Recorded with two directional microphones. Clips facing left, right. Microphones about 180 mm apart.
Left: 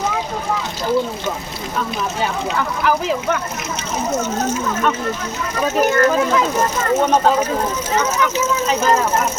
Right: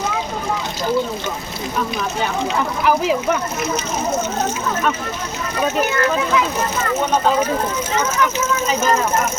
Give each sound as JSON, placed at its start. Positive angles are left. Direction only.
{"t": 2.6, "sound": "speech", "side_deg": -15}
{"t": 5.8, "sound": "speech", "side_deg": 45}